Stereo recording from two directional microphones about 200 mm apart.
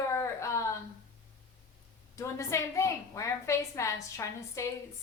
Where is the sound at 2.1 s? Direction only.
15° left (ahead or behind).